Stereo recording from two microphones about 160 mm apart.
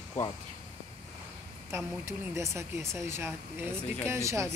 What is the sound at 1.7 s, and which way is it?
Speech, 15° right (ahead or behind).